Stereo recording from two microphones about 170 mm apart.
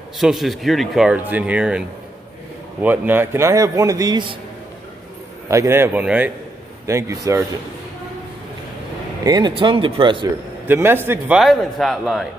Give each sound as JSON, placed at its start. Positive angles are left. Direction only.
{"t": 0.2, "sound": "a man's voice", "side_deg": 0}
{"t": 5.5, "sound": "a man's voice", "side_deg": -15}
{"t": 9.2, "sound": "a man's voice", "side_deg": -25}
{"t": 10.7, "sound": "speech", "side_deg": -15}